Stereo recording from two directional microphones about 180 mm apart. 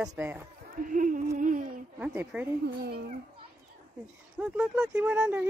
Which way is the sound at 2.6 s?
60° right (ahead or behind).